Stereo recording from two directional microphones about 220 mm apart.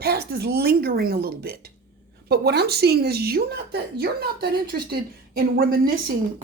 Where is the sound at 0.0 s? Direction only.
45° right (ahead or behind).